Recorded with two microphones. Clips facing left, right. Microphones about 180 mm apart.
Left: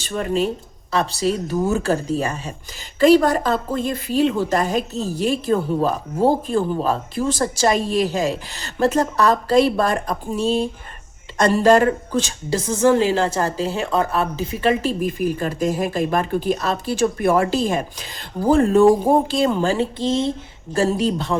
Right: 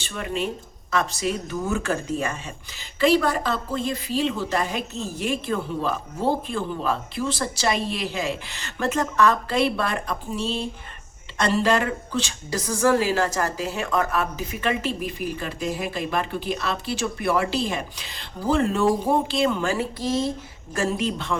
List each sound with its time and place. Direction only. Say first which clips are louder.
0.0 s a woman's voice: left 7 dB; 40° left (ahead or behind)
12.5 s a woman's voice: left 4 dB; 25° left (ahead or behind)
20.7 s speech: left 6 dB; 35° left (ahead or behind)